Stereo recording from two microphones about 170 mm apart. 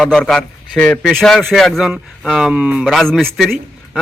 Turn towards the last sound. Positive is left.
turn(degrees=0)  # may be behind; listen again after turning